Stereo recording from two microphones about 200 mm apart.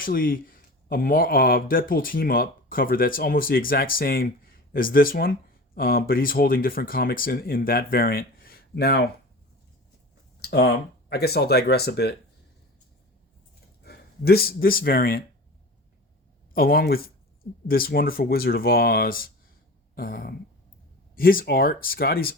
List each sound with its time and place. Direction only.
0.0 s speech: 45° left (ahead or behind)
10.4 s a sound: 55° left (ahead or behind)
11.1 s speech: 50° left (ahead or behind)
13.8 s speech: 50° left (ahead or behind)
16.6 s speech: 50° left (ahead or behind)